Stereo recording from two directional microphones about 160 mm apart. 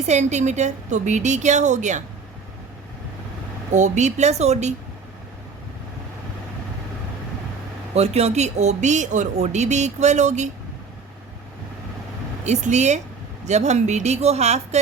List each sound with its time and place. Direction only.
0.1 s speech: 45° right (ahead or behind)
3.7 s speech: 50° right (ahead or behind)
7.9 s speech: 40° right (ahead or behind)
12.5 s speech: 45° right (ahead or behind)